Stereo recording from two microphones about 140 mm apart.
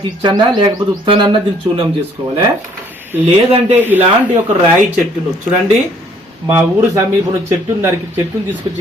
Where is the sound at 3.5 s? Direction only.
45° right (ahead or behind).